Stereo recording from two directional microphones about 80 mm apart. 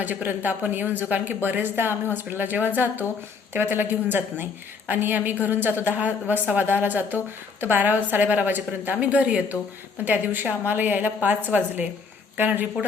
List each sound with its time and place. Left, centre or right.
0.0 s a woman's voice: right